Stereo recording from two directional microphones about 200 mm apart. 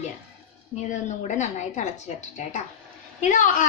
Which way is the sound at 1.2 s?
35° left (ahead or behind).